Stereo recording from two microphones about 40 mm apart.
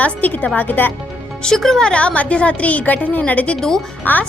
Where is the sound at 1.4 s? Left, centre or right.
Centre.